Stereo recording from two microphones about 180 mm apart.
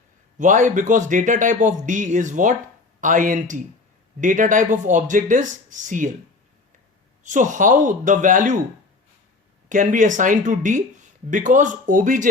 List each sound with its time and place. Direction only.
0.3 s speech: 45° right (ahead or behind)
7.3 s speech: 45° right (ahead or behind)
9.6 s speech: 45° right (ahead or behind)